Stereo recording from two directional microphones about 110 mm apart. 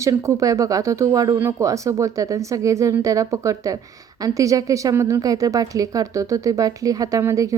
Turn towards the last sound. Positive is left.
turn(degrees=-30)  # may be behind; listen again after turning